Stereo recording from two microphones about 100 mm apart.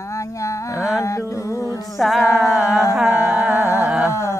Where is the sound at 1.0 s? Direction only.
30° left (ahead or behind).